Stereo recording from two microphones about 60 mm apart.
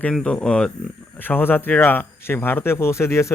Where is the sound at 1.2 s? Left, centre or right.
Left.